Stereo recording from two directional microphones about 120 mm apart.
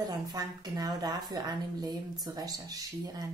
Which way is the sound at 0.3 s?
30° right (ahead or behind).